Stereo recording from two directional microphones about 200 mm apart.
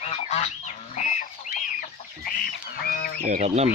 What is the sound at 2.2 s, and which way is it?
Goose, 50° left (ahead or behind).